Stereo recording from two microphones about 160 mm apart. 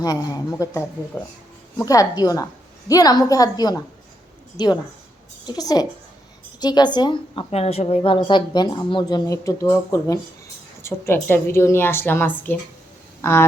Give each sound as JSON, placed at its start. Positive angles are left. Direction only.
{"t": 0.0, "sound": "a woman's voice", "side_deg": 20}